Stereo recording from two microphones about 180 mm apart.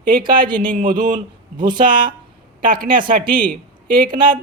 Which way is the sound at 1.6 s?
25° right (ahead or behind).